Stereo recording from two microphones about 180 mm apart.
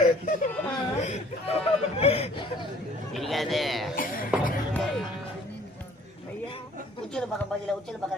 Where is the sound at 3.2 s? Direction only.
Centre (ahead or behind).